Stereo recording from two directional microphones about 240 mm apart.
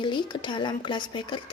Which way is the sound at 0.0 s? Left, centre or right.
Centre.